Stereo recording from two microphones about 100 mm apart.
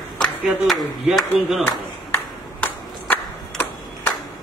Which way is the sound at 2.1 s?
15° left (ahead or behind).